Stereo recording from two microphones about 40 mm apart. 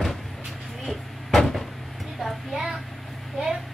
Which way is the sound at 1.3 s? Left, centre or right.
Centre.